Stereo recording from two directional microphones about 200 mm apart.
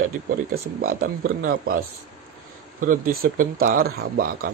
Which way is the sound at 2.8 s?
40° right (ahead or behind).